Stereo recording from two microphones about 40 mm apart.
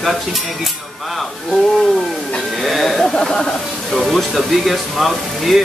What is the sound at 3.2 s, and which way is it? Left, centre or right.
Speech, centre.